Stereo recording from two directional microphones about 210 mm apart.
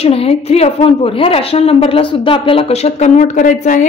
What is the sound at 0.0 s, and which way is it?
A woman's voice, 30° left (ahead or behind).